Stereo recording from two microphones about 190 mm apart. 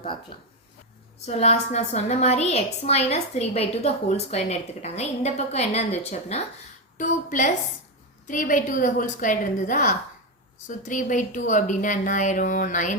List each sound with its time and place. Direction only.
0.3 s a woman's voice: 25° left (ahead or behind); by 12.9 s 45° left (ahead or behind)